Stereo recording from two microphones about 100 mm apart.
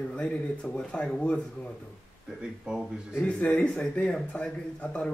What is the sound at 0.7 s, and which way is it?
Speech, 10° left (ahead or behind).